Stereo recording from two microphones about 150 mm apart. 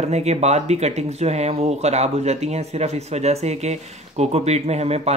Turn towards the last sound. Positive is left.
turn(degrees=-45)  # may be behind; listen again after turning